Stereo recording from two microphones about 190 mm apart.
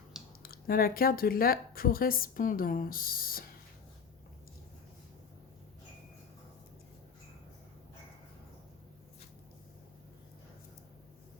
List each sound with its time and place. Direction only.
0.4 s speech: 50° left (ahead or behind)